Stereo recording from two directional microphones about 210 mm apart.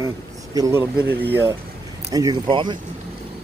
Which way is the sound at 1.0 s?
50° right (ahead or behind).